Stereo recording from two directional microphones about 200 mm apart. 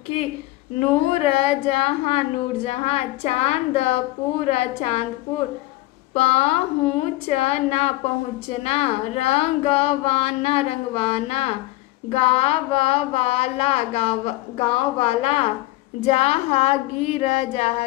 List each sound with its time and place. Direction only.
0.7 s a woman's voice: 30° left (ahead or behind)
6.1 s a woman's voice: 30° left (ahead or behind)
12.1 s a sound: 30° left (ahead or behind)
16.0 s a woman's voice: 30° left (ahead or behind)